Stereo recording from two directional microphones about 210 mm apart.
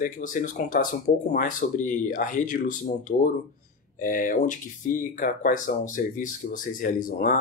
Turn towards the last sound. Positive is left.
turn(degrees=40)  # may be behind; listen again after turning